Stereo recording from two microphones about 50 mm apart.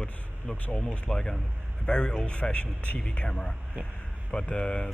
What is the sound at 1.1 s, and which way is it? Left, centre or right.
Speech, centre.